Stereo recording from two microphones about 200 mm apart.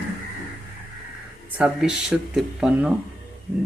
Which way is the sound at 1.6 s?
5° right (ahead or behind).